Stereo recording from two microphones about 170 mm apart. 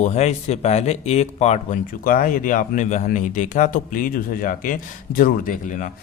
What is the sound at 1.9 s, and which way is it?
Speech, 55° left (ahead or behind).